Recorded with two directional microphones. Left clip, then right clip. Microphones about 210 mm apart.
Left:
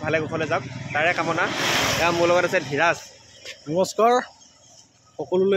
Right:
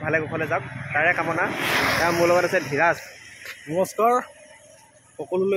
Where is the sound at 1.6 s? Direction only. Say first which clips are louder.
Right 1 dB; 40° left (ahead or behind).